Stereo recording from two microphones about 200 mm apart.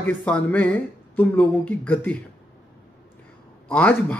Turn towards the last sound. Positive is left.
turn(degrees=5)  # may be behind; listen again after turning